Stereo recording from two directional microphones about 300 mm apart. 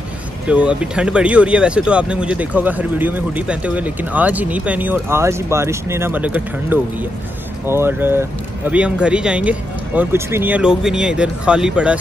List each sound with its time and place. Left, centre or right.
0.5 s speech: centre